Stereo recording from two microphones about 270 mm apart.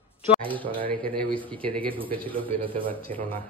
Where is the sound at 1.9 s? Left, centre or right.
Centre.